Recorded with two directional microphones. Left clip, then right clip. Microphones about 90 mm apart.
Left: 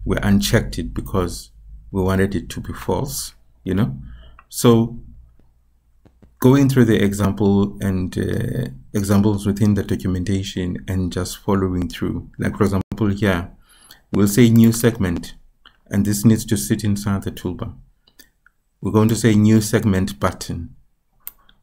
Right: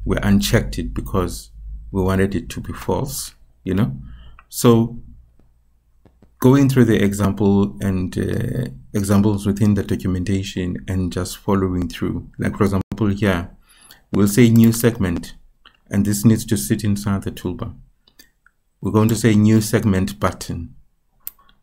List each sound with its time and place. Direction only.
0.0 s speech: 5° left (ahead or behind)
6.0 s speech: centre (ahead or behind)
21.3 s tick-tock: 35° right (ahead or behind)